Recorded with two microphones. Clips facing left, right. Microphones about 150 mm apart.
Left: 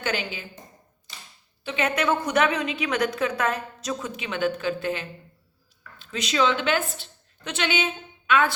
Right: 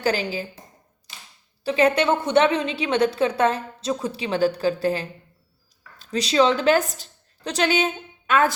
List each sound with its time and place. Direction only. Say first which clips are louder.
0.0 s a woman's voice: right 6 dB; 35° right (ahead or behind)
1.6 s a woman's voice: right 6 dB; 35° right (ahead or behind)